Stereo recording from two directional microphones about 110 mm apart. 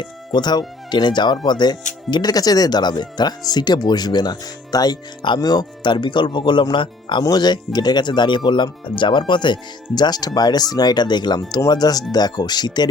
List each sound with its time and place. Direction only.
0.0 s speech: 40° left (ahead or behind)